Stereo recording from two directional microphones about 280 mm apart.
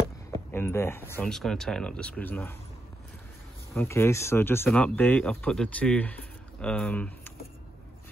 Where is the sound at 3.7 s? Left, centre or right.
Centre.